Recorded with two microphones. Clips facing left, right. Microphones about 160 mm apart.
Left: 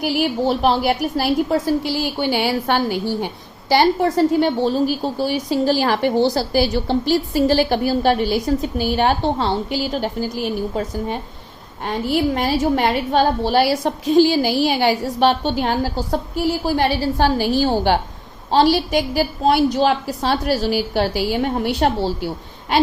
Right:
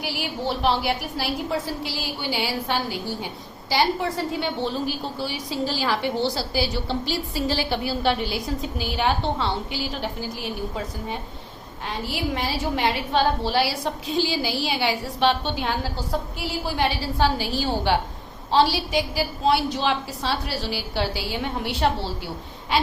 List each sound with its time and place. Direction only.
0.0 s a woman's voice: 45° left (ahead or behind)
2.1 s a woman's voice: 60° left (ahead or behind); by 10.2 s 40° left (ahead or behind)
11.9 s a woman's voice: 50° left (ahead or behind)